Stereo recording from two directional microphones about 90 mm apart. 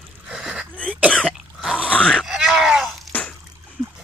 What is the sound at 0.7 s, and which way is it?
Cough, 15° left (ahead or behind).